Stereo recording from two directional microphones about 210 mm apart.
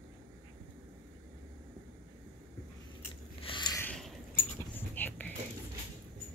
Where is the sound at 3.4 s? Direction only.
20° left (ahead or behind).